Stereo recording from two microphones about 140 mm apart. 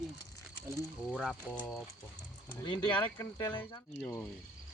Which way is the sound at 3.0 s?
25° left (ahead or behind).